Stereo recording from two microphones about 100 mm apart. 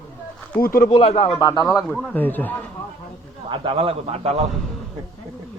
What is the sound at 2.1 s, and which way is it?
Speech, 20° left (ahead or behind).